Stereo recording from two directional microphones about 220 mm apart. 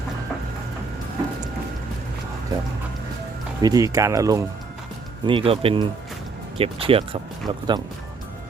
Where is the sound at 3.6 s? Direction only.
15° right (ahead or behind).